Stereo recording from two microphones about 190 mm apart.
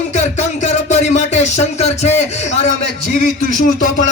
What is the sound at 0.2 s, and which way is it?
Music, 40° left (ahead or behind).